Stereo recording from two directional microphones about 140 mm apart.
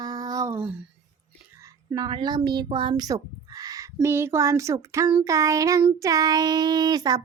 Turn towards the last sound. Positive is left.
turn(degrees=-30)  # may be behind; listen again after turning